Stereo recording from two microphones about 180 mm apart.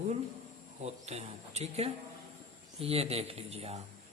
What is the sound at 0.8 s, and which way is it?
Speech, 35° right (ahead or behind).